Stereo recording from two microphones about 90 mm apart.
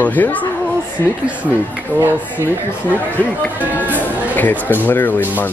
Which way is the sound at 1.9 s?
20° right (ahead or behind).